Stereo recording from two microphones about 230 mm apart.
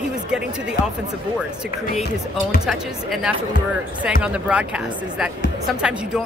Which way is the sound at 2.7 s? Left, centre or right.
Centre.